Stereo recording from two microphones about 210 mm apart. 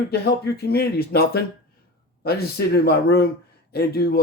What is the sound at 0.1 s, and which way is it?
Speech, 50° left (ahead or behind).